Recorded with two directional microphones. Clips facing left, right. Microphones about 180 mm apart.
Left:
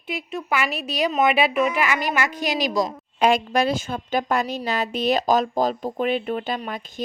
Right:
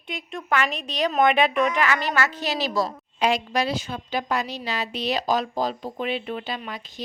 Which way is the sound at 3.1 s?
50° left (ahead or behind).